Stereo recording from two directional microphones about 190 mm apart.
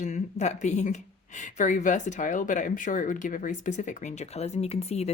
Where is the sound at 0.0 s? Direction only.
40° left (ahead or behind).